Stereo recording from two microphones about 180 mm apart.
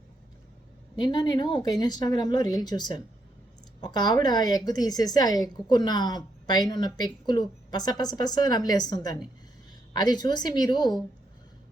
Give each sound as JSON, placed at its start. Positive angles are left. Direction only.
{"t": 0.9, "sound": "a woman's voice", "side_deg": 25}